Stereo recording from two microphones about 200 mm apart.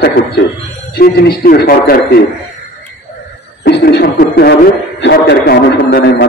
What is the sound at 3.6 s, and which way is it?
A man's voice, 55° left (ahead or behind).